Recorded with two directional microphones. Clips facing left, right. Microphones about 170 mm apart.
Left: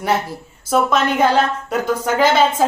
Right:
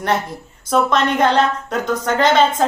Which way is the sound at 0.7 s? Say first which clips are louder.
Even; 5° left (ahead or behind).